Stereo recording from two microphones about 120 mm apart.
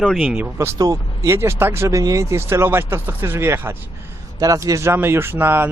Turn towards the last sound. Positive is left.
turn(degrees=-15)  # may be behind; listen again after turning